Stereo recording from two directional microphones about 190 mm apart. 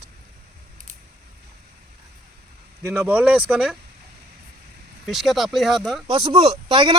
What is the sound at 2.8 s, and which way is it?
Speech, 10° right (ahead or behind).